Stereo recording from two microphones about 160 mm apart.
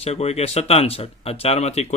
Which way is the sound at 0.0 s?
40° left (ahead or behind).